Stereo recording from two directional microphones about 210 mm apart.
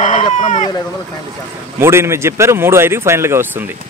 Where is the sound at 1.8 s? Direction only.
10° right (ahead or behind).